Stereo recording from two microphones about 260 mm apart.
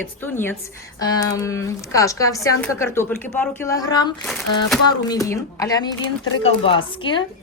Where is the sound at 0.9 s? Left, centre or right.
Centre.